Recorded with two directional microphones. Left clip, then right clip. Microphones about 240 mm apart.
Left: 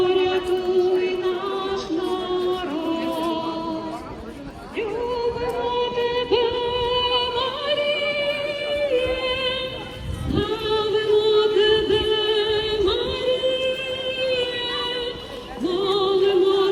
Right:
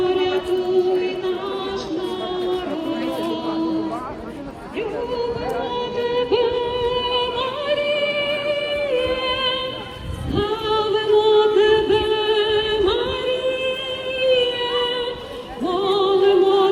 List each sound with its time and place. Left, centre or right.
0.0 s music: left
5.7 s music: left; by 16.6 s centre